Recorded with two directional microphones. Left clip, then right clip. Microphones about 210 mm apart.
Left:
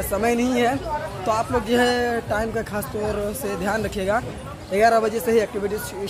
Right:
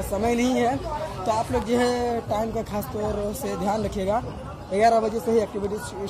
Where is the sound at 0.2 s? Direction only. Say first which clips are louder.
Left 2 dB; centre (ahead or behind).